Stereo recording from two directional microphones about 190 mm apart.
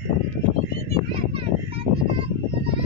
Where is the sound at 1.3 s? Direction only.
30° right (ahead or behind).